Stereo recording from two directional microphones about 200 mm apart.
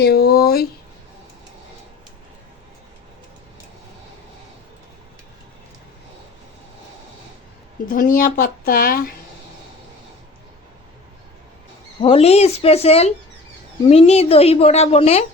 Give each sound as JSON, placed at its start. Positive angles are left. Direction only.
{"t": 0.0, "sound": "speech", "side_deg": 50}
{"t": 7.9, "sound": "speech", "side_deg": 45}
{"t": 11.9, "sound": "a woman's voice", "side_deg": 25}